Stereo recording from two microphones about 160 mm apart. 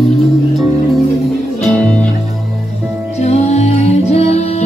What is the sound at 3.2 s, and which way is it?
Music, 45° left (ahead or behind).